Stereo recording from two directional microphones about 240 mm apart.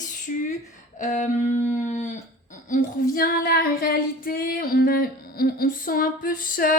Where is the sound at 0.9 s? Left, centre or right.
Left.